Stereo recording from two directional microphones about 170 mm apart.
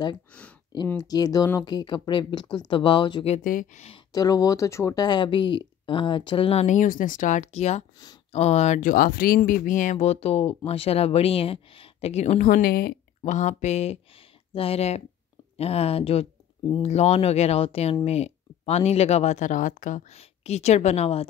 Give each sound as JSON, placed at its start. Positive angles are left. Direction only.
{"t": 0.3, "sound": "speech", "side_deg": 10}
{"t": 0.9, "sound": "speech", "side_deg": 25}
{"t": 3.4, "sound": "speech", "side_deg": 55}
{"t": 4.1, "sound": "speech", "side_deg": 20}
{"t": 12.4, "sound": "speech", "side_deg": 60}
{"t": 13.2, "sound": "speech", "side_deg": 45}